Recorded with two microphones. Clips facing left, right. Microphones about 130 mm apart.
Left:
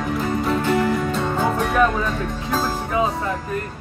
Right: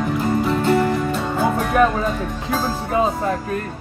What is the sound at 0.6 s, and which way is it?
Music, 45° right (ahead or behind).